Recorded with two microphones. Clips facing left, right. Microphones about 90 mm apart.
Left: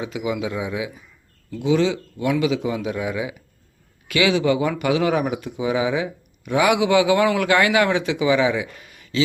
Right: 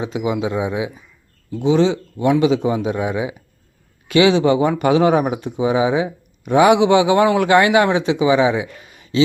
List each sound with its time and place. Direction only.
0.0 s speech: 30° right (ahead or behind)